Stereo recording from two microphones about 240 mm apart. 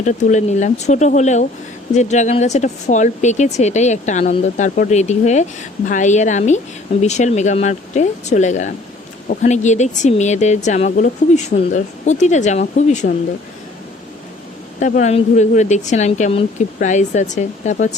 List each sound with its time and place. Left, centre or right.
0.0 s speech: left
14.8 s speech: left